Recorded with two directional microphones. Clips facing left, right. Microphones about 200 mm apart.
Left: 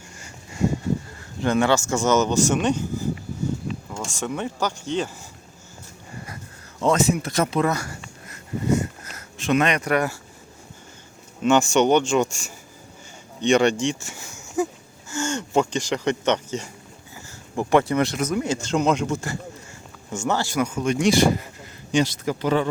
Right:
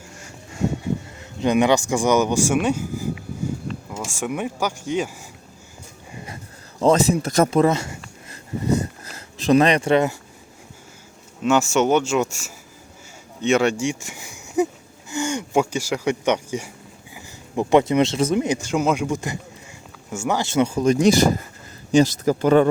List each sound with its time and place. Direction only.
0.2 s a sound: centre (ahead or behind)
1.4 s speech: 15° right (ahead or behind)
6.7 s speech: 35° right (ahead or behind)
7.7 s speech: 25° right (ahead or behind)
8.3 s a sound: 35° right (ahead or behind)
11.4 s speech: 5° right (ahead or behind); by 18.4 s 25° right (ahead or behind)
18.4 s speech: 15° right (ahead or behind)
20.5 s speech: 30° right (ahead or behind); by 22.7 s 50° right (ahead or behind)